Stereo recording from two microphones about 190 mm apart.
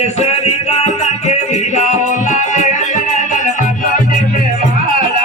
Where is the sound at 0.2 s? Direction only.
35° left (ahead or behind).